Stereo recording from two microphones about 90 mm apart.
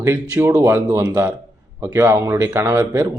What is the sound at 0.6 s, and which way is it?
A man's voice, 30° right (ahead or behind).